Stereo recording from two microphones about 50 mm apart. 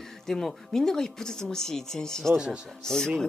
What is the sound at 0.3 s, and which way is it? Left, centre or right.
Speech, centre.